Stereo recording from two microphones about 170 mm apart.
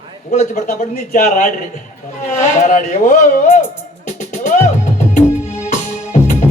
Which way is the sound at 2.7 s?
50° left (ahead or behind).